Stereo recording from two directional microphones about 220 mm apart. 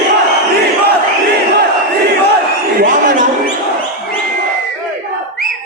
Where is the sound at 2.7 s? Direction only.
35° right (ahead or behind).